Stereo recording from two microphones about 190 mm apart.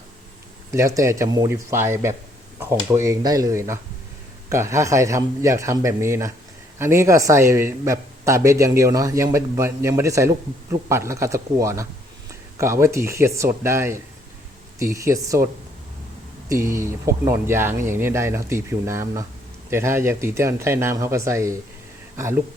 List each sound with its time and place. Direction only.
0.7 s speech: 15° right (ahead or behind)
16.5 s speech: 15° right (ahead or behind)